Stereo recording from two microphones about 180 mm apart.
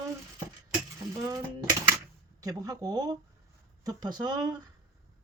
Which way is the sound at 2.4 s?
20° right (ahead or behind).